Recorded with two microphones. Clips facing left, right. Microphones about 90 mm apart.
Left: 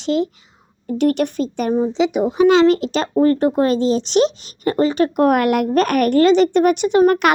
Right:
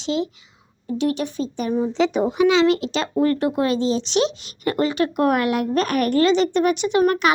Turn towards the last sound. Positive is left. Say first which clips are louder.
# left 5 dB
turn(degrees=40)  # may be behind; listen again after turning